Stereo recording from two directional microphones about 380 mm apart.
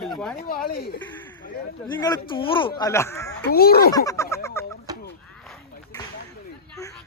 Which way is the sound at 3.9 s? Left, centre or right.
Centre.